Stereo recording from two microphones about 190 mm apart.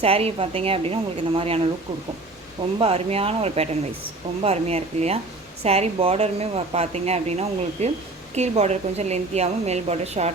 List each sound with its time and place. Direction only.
0.0 s speech: 30° right (ahead or behind)
2.7 s speech: 30° right (ahead or behind)